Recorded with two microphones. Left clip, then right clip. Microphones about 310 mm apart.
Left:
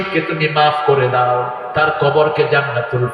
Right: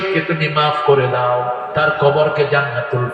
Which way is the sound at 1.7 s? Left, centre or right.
Left.